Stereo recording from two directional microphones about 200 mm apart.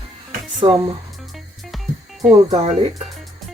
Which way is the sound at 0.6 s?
25° right (ahead or behind).